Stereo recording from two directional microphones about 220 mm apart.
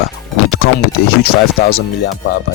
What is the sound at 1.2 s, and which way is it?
Speech, 45° left (ahead or behind).